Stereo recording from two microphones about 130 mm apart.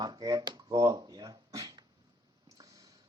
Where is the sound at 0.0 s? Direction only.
30° right (ahead or behind).